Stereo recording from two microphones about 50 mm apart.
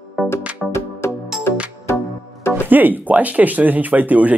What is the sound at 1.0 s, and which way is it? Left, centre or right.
Music, left.